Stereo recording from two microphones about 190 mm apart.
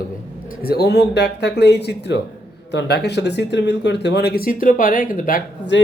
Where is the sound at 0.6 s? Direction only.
55° left (ahead or behind).